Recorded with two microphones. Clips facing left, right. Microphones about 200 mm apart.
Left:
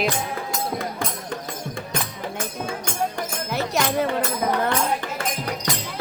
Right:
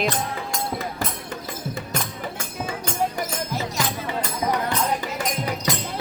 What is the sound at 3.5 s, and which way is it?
Music, 65° left (ahead or behind).